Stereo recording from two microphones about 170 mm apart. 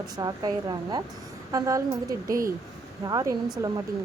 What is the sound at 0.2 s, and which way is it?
A woman's voice, 25° right (ahead or behind).